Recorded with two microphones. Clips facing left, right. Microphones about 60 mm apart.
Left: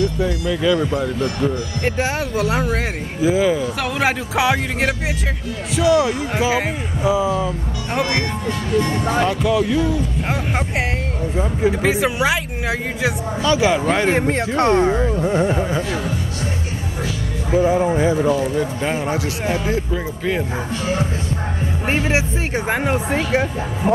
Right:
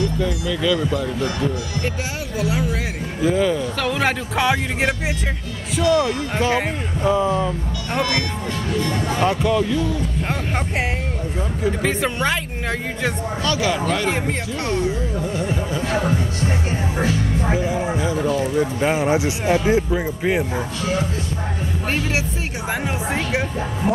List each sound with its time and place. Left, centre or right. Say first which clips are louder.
0.2 s speech: left 2 dB; centre
1.2 s speech: left 2 dB; left
3.2 s speech: left 2 dB; centre
8.7 s speech: left 5 dB; left
9.2 s speech: right 1 dB; centre
11.8 s speech: left 3 dB; centre
13.4 s speech: left 5 dB; centre
13.8 s speech: left 4 dB; left
14.1 s speech: left 6 dB; left
17.0 s music: right 5 dB; right
17.6 s a sound: left 6 dB; left
18.8 s speech: right 3 dB; centre
21.8 s speech: left 4 dB; left